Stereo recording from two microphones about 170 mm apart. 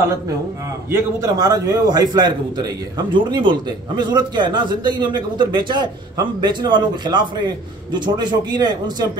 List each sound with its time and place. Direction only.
0.8 s a man's voice: 15° right (ahead or behind)